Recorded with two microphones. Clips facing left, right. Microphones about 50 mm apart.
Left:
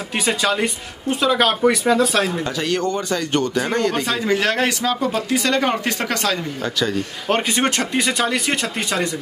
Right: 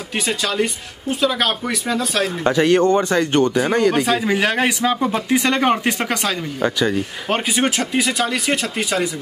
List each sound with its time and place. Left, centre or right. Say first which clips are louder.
0.3 s speech: left 1 dB; centre
2.4 s speech: right 7 dB; right
3.5 s speech: right 3 dB; centre